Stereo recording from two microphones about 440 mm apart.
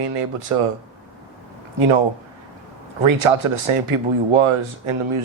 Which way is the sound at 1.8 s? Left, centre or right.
Right.